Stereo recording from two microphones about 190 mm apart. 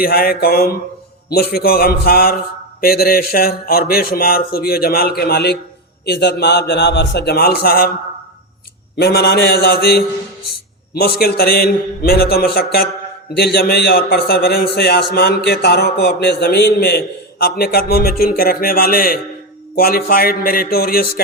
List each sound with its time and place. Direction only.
0.0 s a man's voice: 50° left (ahead or behind)
9.0 s a man's voice: 55° left (ahead or behind)
11.2 s a man's voice: 55° left (ahead or behind)